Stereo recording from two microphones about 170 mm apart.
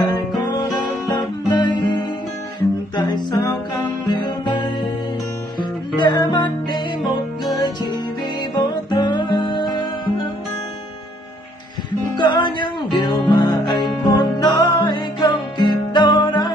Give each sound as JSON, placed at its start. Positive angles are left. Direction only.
{"t": 1.1, "sound": "music", "side_deg": 25}
{"t": 3.0, "sound": "music", "side_deg": 25}
{"t": 5.6, "sound": "music", "side_deg": 25}
{"t": 8.5, "sound": "music", "side_deg": 25}
{"t": 12.2, "sound": "music", "side_deg": 25}